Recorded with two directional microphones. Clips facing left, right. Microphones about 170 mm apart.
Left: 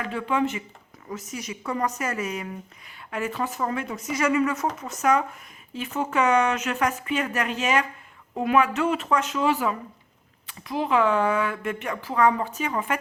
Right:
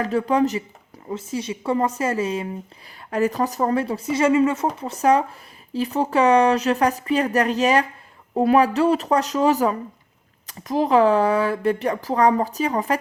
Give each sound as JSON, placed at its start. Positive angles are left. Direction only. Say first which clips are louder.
{"t": 0.0, "sound": "a woman's voice", "louder": "right 6 dB", "side_deg": -40}